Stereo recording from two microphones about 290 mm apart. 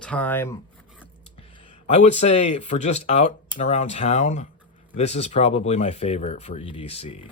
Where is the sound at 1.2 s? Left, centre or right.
Centre.